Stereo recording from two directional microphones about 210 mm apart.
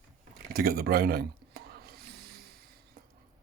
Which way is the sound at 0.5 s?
45° right (ahead or behind).